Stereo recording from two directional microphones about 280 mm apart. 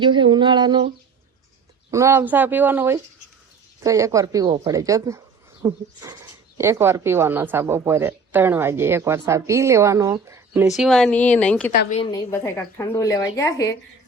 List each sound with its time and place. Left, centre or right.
0.0 s speech: centre
1.9 s speech: centre
11.7 s a woman's voice: left; by 13.7 s centre